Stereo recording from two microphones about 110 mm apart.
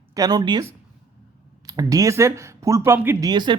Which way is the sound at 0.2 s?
40° right (ahead or behind).